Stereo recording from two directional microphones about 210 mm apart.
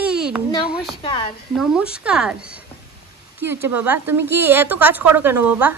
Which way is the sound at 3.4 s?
10° right (ahead or behind).